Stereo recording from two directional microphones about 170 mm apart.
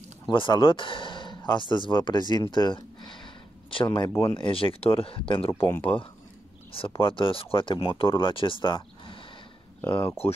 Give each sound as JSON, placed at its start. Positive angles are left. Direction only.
{"t": 0.3, "sound": "speech", "side_deg": 30}
{"t": 5.5, "sound": "speech", "side_deg": 15}
{"t": 7.0, "sound": "speech", "side_deg": 30}